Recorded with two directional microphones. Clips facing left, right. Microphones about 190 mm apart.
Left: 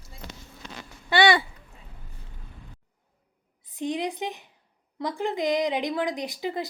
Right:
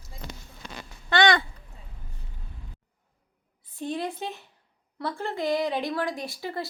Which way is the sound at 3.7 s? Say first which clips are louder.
Left 2 dB; 15° left (ahead or behind).